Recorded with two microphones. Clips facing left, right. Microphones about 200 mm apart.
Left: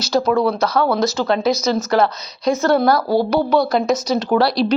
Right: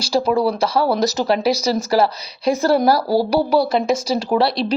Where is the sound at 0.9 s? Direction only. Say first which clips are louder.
Even; 35° right (ahead or behind).